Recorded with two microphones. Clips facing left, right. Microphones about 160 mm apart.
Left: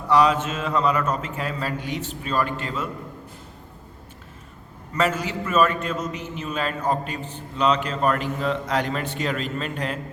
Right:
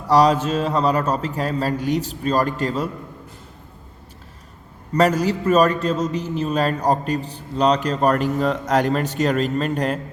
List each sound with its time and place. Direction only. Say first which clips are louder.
0.1 s a man's voice: right 3 dB; 35° right (ahead or behind)
4.9 s a man's voice: right 6 dB; 40° right (ahead or behind)